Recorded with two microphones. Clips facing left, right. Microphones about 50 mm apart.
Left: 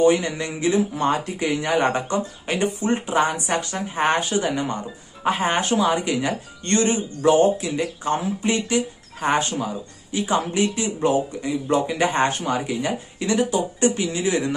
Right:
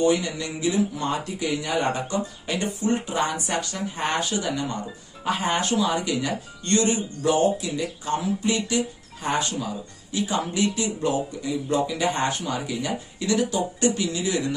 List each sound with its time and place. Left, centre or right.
0.0 s speech: left